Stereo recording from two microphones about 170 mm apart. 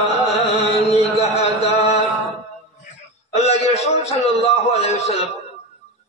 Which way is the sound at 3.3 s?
40° left (ahead or behind).